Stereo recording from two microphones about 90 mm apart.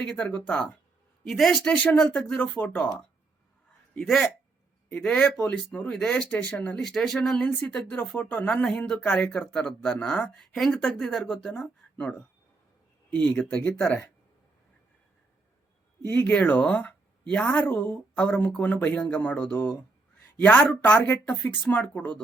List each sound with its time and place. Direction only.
0.0 s speech: 10° left (ahead or behind)
1.2 s speech: 5° left (ahead or behind)
3.9 s speech: 5° left (ahead or behind)
11.8 s a sound: 10° left (ahead or behind)
13.1 s speech: 15° left (ahead or behind)
16.0 s speech: 20° left (ahead or behind)